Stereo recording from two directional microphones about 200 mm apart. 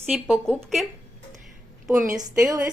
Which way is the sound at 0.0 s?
Centre (ahead or behind).